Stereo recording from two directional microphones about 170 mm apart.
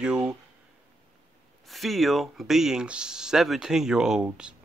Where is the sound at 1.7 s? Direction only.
Centre (ahead or behind).